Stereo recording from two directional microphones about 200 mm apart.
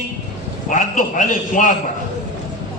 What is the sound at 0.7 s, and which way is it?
A man's voice, 40° left (ahead or behind).